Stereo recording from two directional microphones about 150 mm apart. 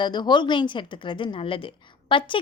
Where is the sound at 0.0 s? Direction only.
30° left (ahead or behind).